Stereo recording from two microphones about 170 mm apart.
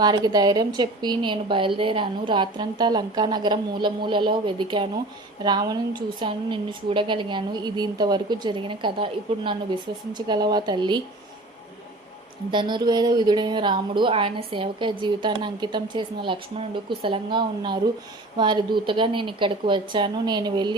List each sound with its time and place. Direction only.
0.0 s a woman's voice: 25° right (ahead or behind)
12.5 s a woman's voice: 25° right (ahead or behind)